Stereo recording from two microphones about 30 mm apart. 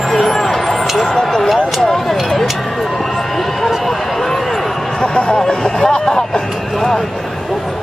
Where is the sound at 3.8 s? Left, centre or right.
Centre.